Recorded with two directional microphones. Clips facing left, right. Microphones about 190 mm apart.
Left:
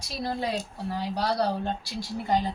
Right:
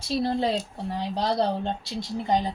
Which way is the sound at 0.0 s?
30° right (ahead or behind).